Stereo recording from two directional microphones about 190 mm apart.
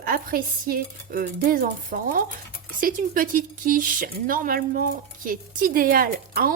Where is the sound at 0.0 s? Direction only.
50° right (ahead or behind).